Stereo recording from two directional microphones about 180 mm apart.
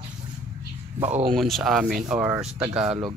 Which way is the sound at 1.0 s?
40° right (ahead or behind).